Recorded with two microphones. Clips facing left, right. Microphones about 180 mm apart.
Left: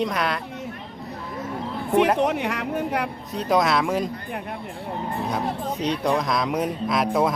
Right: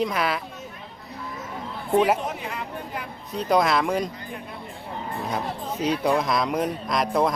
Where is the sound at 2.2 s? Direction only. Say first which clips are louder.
Left 8 dB; 75° left (ahead or behind).